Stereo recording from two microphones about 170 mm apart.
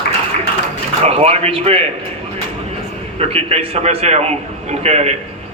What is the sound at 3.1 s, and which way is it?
A man's voice, 35° right (ahead or behind).